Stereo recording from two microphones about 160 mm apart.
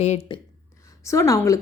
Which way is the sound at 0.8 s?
20° left (ahead or behind).